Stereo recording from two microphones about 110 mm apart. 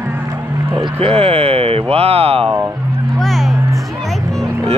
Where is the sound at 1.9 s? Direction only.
65° right (ahead or behind).